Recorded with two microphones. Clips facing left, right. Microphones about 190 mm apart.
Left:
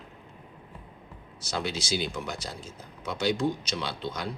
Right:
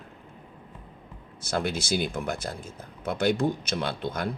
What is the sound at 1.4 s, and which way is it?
Speech, 55° right (ahead or behind).